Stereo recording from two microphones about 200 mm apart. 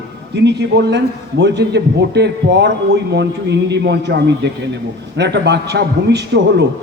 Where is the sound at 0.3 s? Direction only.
60° right (ahead or behind).